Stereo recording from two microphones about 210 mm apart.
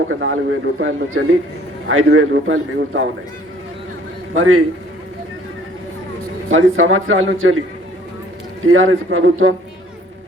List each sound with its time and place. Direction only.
0.1 s a man's voice: 65° right (ahead or behind)
4.4 s a man's voice: 80° right
6.5 s speech: 70° right (ahead or behind)
8.6 s speech: 75° right (ahead or behind)